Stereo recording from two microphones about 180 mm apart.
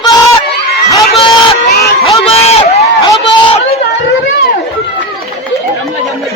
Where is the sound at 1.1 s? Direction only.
35° left (ahead or behind).